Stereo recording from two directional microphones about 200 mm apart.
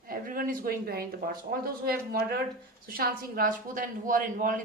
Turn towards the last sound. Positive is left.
turn(degrees=-40)  # may be behind; listen again after turning